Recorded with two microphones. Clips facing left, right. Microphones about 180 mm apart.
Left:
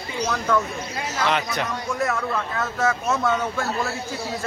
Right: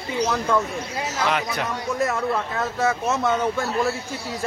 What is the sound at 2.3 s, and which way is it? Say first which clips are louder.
Speech: right 1 dB; 20° right (ahead or behind).